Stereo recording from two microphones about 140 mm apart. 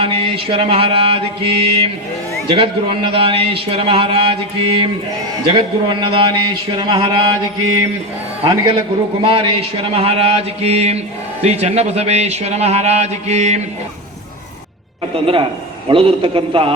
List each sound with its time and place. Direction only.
0.0 s a man's voice: 40° right (ahead or behind)
9.2 s a man's voice: 40° right (ahead or behind)
15.1 s a man's voice: 40° right (ahead or behind)